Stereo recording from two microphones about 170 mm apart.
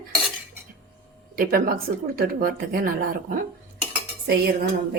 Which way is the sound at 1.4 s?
60° right (ahead or behind).